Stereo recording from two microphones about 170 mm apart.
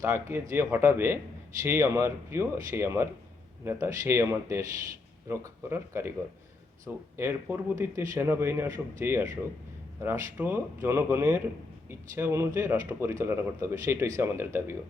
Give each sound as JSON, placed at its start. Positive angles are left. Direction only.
{"t": 0.0, "sound": "speech", "side_deg": -15}